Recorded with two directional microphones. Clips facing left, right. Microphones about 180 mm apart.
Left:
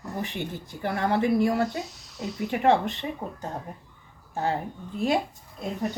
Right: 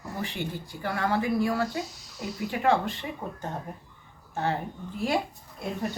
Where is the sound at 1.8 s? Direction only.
Centre (ahead or behind).